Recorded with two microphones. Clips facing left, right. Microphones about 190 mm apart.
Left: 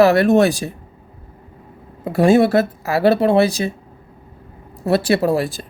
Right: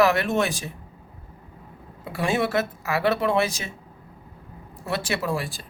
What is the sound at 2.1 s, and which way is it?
Speech, 40° left (ahead or behind).